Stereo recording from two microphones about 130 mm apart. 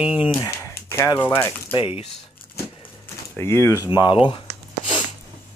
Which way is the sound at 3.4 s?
20° left (ahead or behind).